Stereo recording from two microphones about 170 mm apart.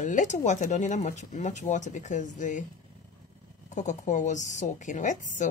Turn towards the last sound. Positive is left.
turn(degrees=45)  # may be behind; listen again after turning